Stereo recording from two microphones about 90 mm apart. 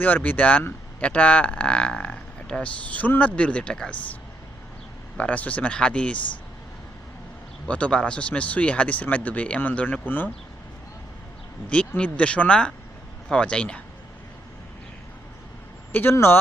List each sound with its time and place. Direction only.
0.0 s speech: 20° left (ahead or behind)
7.7 s speech: 10° left (ahead or behind)
11.9 s speech: 15° left (ahead or behind)
15.9 s speech: 20° left (ahead or behind)